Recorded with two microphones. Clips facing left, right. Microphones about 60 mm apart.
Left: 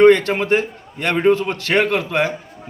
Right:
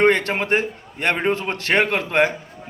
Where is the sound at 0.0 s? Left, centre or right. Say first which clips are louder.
Left 6 dB; right.